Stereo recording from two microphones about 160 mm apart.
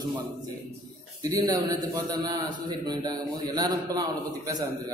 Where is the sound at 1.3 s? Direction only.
25° right (ahead or behind).